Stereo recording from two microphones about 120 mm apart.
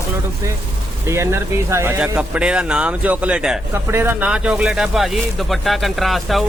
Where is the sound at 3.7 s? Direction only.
20° right (ahead or behind); by 6.4 s centre (ahead or behind).